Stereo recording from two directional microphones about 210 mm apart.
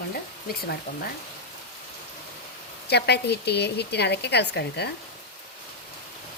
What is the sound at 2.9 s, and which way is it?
A woman's voice, 50° left (ahead or behind).